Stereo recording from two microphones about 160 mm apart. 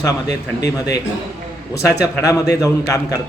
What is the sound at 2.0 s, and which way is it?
Speech, 20° left (ahead or behind).